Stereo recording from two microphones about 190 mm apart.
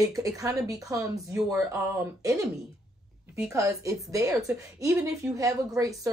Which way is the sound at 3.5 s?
15° right (ahead or behind).